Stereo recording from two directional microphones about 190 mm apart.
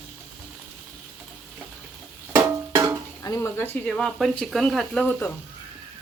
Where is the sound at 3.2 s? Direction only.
15° left (ahead or behind).